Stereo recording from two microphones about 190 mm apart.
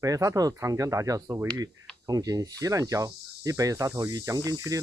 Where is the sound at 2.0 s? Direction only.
20° right (ahead or behind).